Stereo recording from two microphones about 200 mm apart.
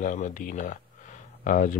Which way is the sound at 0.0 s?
40° left (ahead or behind).